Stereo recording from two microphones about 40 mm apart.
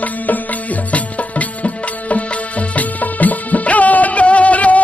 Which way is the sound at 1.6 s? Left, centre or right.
Left.